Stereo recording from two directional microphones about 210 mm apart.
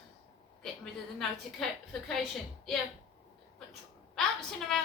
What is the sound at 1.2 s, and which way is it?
A woman's voice, centre (ahead or behind).